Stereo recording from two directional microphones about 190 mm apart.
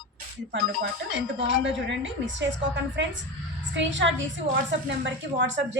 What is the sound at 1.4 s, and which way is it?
A woman's voice, 70° right (ahead or behind).